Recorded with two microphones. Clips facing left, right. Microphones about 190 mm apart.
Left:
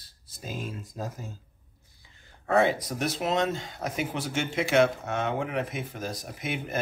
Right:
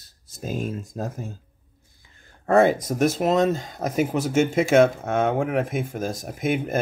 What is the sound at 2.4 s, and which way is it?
Speech, 45° right (ahead or behind).